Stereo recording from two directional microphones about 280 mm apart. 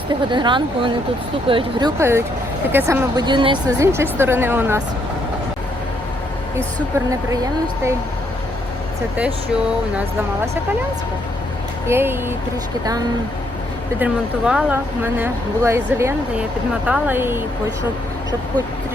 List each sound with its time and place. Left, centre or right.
0.3 s speech: centre
6.7 s speech: centre
11.9 s speech: centre
14.0 s speech: centre